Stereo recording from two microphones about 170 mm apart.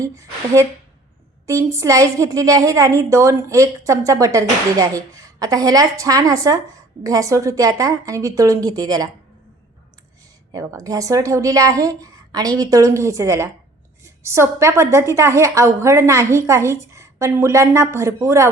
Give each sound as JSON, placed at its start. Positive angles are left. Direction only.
{"t": 0.0, "sound": "a woman's voice", "side_deg": -20}
{"t": 10.5, "sound": "a woman's voice", "side_deg": -20}